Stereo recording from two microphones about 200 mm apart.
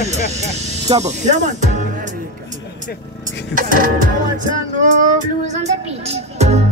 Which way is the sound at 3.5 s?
45° right (ahead or behind).